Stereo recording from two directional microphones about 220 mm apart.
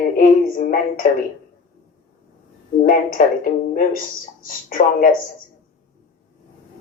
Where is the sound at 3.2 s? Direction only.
40° left (ahead or behind).